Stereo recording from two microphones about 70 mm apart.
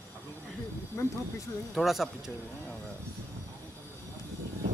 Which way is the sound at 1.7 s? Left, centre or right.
Centre.